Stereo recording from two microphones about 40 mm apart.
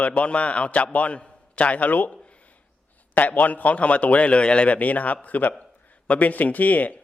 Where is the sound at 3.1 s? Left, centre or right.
Left.